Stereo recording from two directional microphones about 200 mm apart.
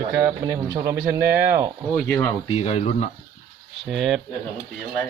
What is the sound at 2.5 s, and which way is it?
Speech, 30° left (ahead or behind).